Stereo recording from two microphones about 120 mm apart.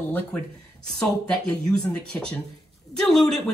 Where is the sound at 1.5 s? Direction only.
10° left (ahead or behind).